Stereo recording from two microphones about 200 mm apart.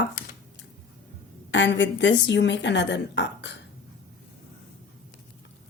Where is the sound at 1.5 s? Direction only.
65° left (ahead or behind).